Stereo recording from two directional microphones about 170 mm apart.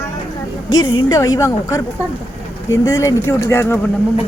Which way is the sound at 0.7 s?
20° left (ahead or behind).